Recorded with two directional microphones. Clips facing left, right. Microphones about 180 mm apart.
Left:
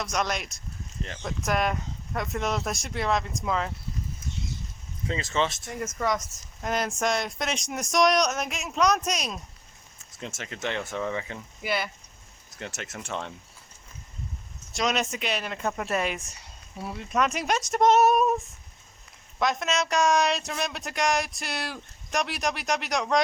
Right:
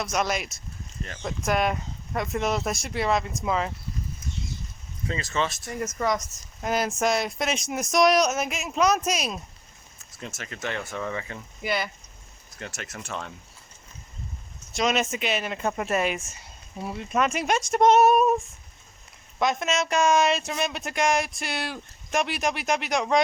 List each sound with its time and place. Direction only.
0.0 s speech: 5° right (ahead or behind)
5.0 s speech: 25° left (ahead or behind)
5.6 s speech: centre (ahead or behind)
10.2 s speech: 20° left (ahead or behind)
11.6 s speech: centre (ahead or behind)
12.5 s speech: 20° left (ahead or behind)
14.7 s speech: centre (ahead or behind)
17.1 s speech: centre (ahead or behind)
19.4 s speech: centre (ahead or behind)